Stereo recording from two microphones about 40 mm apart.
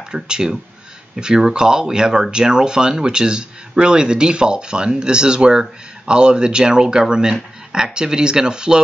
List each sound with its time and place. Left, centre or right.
0.1 s speech: centre